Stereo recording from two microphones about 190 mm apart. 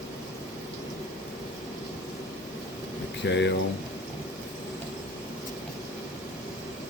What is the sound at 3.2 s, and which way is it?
Speech, 65° left (ahead or behind).